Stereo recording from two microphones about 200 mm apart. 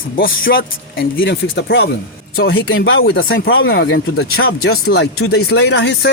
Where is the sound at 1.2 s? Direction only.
60° left (ahead or behind).